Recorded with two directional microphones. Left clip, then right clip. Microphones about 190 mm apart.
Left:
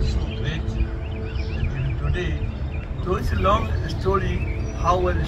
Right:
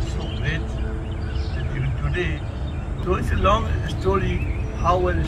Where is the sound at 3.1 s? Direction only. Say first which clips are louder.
Right 1 dB; 15° right (ahead or behind).